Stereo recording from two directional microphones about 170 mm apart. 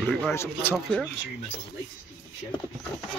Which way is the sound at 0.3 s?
15° left (ahead or behind).